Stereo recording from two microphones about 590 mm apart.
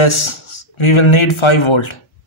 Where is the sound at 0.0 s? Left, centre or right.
Left.